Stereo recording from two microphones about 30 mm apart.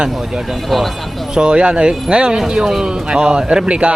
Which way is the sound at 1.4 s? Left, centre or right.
Right.